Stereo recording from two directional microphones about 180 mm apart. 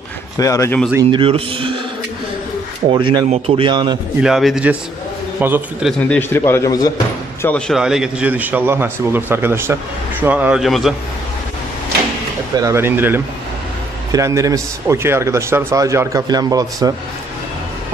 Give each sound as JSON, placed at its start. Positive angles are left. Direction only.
{"t": 0.4, "sound": "a man's voice", "side_deg": 15}
{"t": 1.1, "sound": "speech", "side_deg": -30}
{"t": 2.9, "sound": "speech", "side_deg": -25}
{"t": 4.2, "sound": "a man's voice", "side_deg": 0}
{"t": 5.9, "sound": "a man's voice", "side_deg": 10}
{"t": 7.4, "sound": "a man's voice", "side_deg": 5}
{"t": 12.5, "sound": "a man's voice", "side_deg": -15}